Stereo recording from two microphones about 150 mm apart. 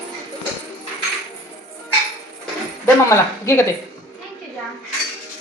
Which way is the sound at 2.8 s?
20° left (ahead or behind).